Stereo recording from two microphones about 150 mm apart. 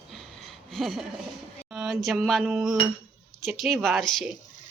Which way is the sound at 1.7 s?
Centre (ahead or behind).